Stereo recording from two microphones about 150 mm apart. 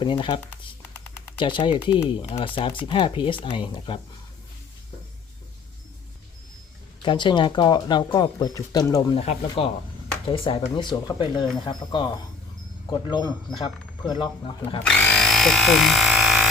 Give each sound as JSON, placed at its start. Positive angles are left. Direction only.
{"t": 0.0, "sound": "speech", "side_deg": 30}
{"t": 0.9, "sound": "a sound", "side_deg": 15}
{"t": 1.4, "sound": "speech", "side_deg": 35}
{"t": 7.0, "sound": "speech", "side_deg": 30}
{"t": 9.1, "sound": "speech", "side_deg": 40}
{"t": 15.0, "sound": "frog", "side_deg": 5}